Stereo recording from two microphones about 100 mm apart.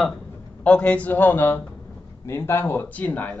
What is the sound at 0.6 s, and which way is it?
Speech, 10° left (ahead or behind).